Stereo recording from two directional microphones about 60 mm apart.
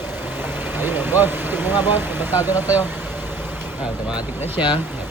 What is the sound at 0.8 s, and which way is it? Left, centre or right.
Speech, right.